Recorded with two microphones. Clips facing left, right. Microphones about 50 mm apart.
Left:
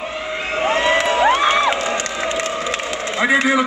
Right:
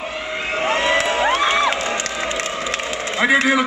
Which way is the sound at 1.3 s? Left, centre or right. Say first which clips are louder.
Left 2 dB; centre.